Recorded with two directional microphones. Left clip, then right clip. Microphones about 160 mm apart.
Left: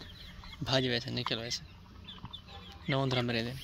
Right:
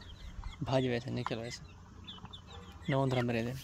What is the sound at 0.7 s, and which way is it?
Speech, 15° right (ahead or behind).